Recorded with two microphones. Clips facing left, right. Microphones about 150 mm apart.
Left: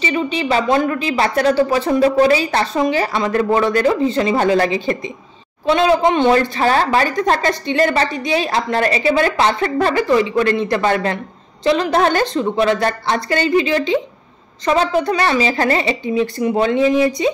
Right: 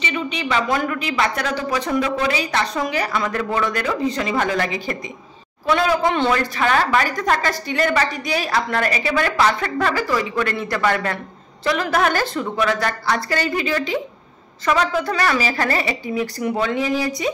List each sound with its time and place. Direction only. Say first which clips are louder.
0.0 s a woman's voice: left 6 dB; 35° left (ahead or behind)